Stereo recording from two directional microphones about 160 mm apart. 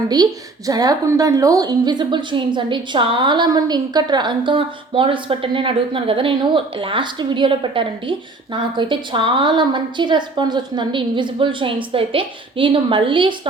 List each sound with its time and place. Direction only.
0.7 s a woman's voice: 25° right (ahead or behind)